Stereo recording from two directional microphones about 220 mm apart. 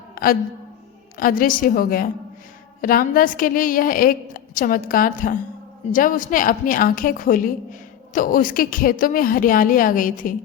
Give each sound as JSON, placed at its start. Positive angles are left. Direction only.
{"t": 1.2, "sound": "a woman's voice", "side_deg": 40}